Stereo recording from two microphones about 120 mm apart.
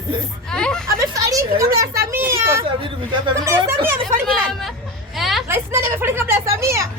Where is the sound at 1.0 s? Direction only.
30° right (ahead or behind).